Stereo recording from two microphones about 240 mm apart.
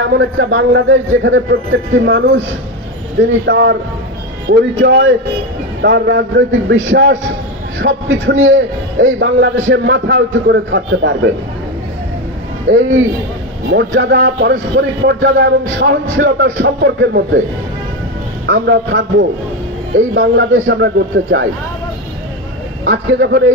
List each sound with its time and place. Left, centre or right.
0.2 s speech: right
13.7 s speech: right
18.5 s speech: right
22.8 s speech: right